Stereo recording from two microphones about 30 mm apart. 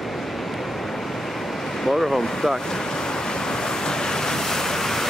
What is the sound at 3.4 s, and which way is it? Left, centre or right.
Waves, left.